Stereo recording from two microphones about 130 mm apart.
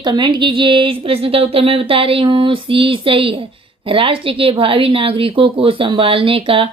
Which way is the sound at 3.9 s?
45° right (ahead or behind).